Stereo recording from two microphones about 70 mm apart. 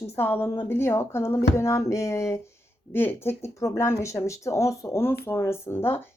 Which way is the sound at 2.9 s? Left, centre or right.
Left.